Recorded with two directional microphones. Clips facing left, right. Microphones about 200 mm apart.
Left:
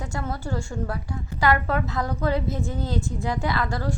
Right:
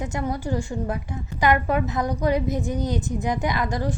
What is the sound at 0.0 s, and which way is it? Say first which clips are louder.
A woman's voice: right 4 dB; 20° right (ahead or behind).